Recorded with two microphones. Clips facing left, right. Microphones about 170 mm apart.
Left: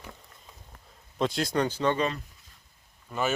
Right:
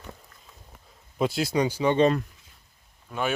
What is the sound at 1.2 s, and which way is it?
Speech, 5° right (ahead or behind).